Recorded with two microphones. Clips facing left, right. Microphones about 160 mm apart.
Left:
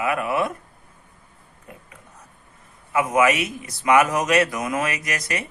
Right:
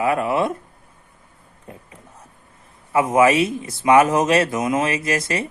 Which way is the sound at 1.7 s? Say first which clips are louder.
Right 4 dB; 30° right (ahead or behind).